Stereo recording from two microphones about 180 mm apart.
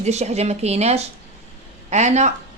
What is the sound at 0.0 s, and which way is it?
Speech, 35° right (ahead or behind).